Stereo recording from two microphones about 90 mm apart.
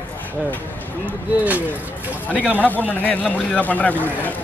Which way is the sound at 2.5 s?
20° left (ahead or behind).